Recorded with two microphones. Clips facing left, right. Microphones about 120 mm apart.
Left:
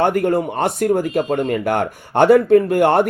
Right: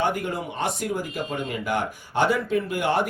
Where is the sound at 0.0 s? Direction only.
55° left (ahead or behind).